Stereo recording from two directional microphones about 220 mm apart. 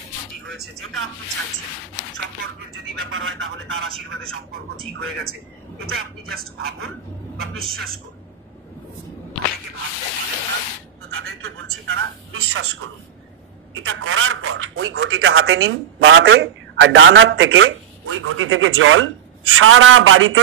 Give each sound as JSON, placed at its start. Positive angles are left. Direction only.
{"t": 2.7, "sound": "speech", "side_deg": -65}
{"t": 11.1, "sound": "a sound", "side_deg": -70}
{"t": 13.8, "sound": "speech", "side_deg": -70}